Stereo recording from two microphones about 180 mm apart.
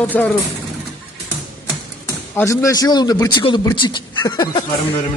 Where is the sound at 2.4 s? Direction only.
20° left (ahead or behind).